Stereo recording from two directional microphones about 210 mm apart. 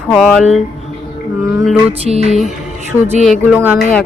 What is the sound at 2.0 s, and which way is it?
Music, 30° right (ahead or behind).